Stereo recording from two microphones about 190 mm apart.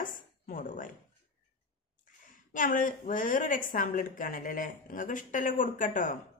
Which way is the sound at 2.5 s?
45° left (ahead or behind).